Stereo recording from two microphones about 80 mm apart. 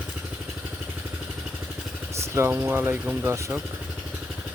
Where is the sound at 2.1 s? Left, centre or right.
Right.